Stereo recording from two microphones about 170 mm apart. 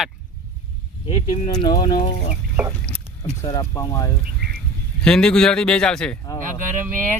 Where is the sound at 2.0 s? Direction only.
40° left (ahead or behind).